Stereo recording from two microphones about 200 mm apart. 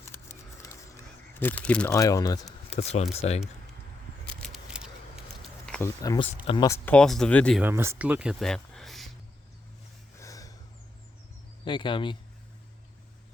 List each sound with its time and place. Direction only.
0.0 s a sound: 15° left (ahead or behind)
1.9 s speech: 15° left (ahead or behind)
2.7 s speech: 30° left (ahead or behind)
4.3 s a sound: centre (ahead or behind)
6.0 s speech: 20° left (ahead or behind)
7.6 s speech: 10° right (ahead or behind)
10.2 s snort: 15° left (ahead or behind)
11.6 s speech: 25° left (ahead or behind)